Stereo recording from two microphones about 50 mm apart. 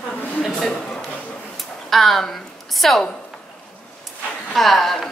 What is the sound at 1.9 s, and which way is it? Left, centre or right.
A woman's voice, centre.